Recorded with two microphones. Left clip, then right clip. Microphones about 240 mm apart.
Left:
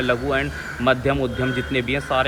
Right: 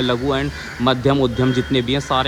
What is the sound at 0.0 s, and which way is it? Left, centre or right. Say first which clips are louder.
A man's voice: right 1 dB; centre.